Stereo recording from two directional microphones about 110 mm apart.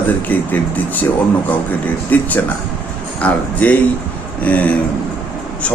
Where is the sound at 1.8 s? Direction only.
15° left (ahead or behind).